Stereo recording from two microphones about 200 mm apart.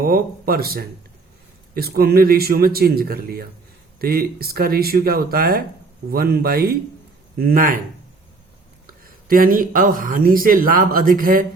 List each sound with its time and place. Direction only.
0.0 s speech: 50° right (ahead or behind)
9.0 s speech: 45° right (ahead or behind)